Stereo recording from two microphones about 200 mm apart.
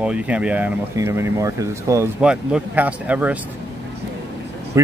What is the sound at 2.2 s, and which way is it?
Speech, 5° right (ahead or behind).